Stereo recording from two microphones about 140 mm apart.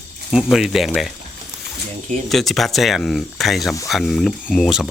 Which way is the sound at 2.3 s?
Centre (ahead or behind).